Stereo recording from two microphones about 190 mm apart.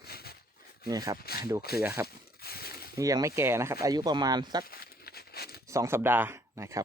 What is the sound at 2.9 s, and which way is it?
Speech, 15° right (ahead or behind).